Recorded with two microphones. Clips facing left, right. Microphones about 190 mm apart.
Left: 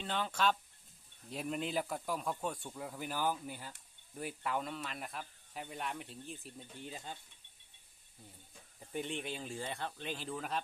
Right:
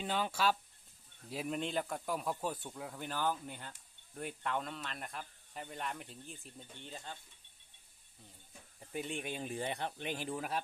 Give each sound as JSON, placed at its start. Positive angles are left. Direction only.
{"t": 0.0, "sound": "speech", "side_deg": -10}
{"t": 6.8, "sound": "speech", "side_deg": 10}
{"t": 8.9, "sound": "speech", "side_deg": -10}